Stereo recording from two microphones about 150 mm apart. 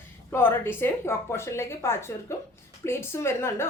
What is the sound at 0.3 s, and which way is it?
A woman's voice, 15° left (ahead or behind).